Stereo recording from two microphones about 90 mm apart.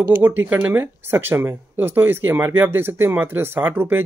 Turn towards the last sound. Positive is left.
turn(degrees=-25)  # may be behind; listen again after turning